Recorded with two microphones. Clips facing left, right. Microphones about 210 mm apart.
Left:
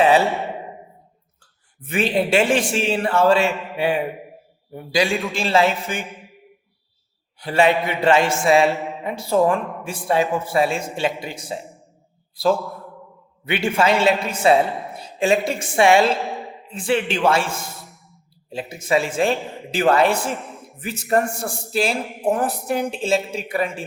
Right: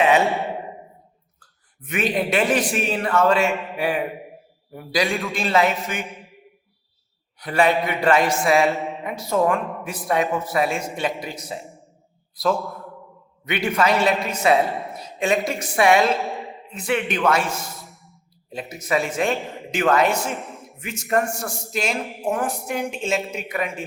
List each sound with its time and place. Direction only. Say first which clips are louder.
0.3 s speech: even; centre (ahead or behind)
1.8 s a man's voice: left 3 dB; 30° left (ahead or behind)
3.5 s speech: right 2 dB; centre (ahead or behind)
3.8 s a man's voice: left 5 dB; 25° left (ahead or behind)
7.3 s a man's voice: left 2 dB; 25° left (ahead or behind)
8.5 s a sound: left 3 dB; centre (ahead or behind)
9.0 s a man's voice: left 4 dB; 30° left (ahead or behind)
9.6 s speech: even; centre (ahead or behind)
9.8 s a man's voice: left 3 dB; 30° left (ahead or behind)
16.2 s speech: left 1 dB; centre (ahead or behind)
16.6 s a man's voice: left 3 dB; 30° left (ahead or behind)
17.8 s a sound: even; centre (ahead or behind)
18.5 s a man's voice: left 3 dB; 30° left (ahead or behind)